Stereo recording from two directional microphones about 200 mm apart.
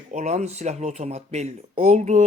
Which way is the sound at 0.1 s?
35° right (ahead or behind).